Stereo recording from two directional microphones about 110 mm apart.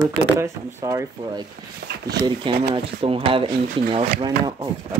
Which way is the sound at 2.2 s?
50° right (ahead or behind).